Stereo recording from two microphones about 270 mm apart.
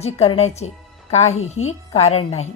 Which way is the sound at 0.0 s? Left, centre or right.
Left.